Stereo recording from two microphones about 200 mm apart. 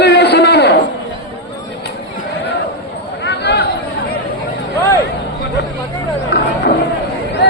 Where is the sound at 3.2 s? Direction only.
60° left (ahead or behind).